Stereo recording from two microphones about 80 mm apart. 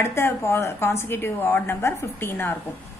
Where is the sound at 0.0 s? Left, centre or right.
Left.